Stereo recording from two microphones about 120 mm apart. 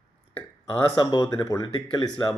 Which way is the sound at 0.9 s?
35° left (ahead or behind).